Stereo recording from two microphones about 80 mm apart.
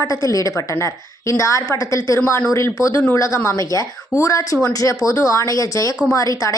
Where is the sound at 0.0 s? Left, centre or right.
Left.